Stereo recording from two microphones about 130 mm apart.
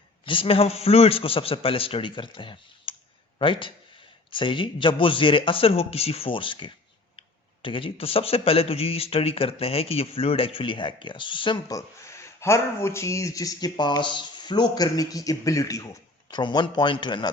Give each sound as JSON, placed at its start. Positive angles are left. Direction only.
{"t": 0.3, "sound": "a man's voice", "side_deg": 45}
{"t": 11.7, "sound": "a man's voice", "side_deg": 25}